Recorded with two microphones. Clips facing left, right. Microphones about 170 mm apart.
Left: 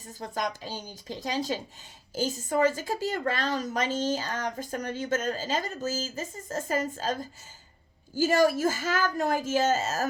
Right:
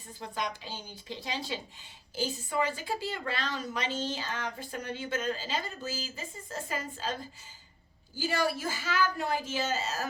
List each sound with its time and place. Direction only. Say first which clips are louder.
0.1 s a woman's voice: left 4 dB; 45° left (ahead or behind)